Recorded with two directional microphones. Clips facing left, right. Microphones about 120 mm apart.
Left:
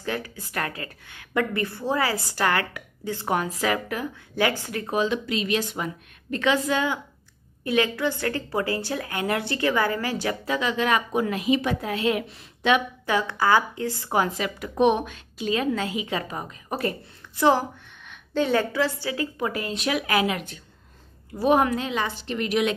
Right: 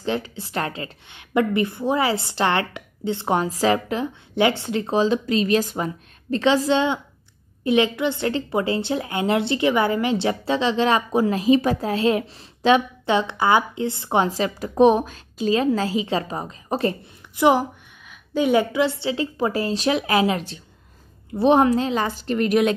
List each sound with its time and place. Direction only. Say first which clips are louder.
0.0 s a woman's voice: right 5 dB; 25° right (ahead or behind)
17.4 s a woman's voice: right 3 dB; 15° right (ahead or behind); by 22.8 s 45° right (ahead or behind)